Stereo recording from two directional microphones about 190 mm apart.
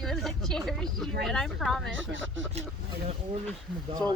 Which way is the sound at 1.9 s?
80° right.